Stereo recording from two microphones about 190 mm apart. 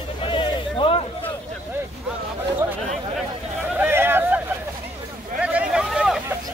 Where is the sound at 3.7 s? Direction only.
10° right (ahead or behind).